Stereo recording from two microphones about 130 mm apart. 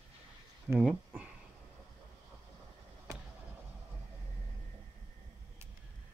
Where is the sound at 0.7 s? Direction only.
10° right (ahead or behind).